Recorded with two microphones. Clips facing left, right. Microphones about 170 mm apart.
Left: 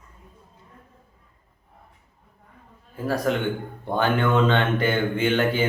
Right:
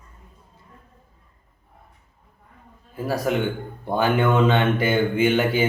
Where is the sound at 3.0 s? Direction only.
10° right (ahead or behind).